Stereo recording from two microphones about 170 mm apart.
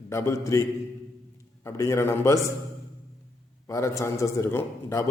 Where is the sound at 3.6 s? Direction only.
20° left (ahead or behind).